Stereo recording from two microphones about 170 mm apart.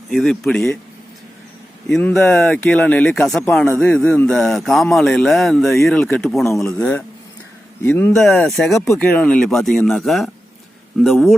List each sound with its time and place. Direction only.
0.1 s speech: centre (ahead or behind)
1.9 s speech: 5° left (ahead or behind)
6.0 s speech: 10° left (ahead or behind)
6.7 s speech: 5° left (ahead or behind)
8.1 s speech: centre (ahead or behind)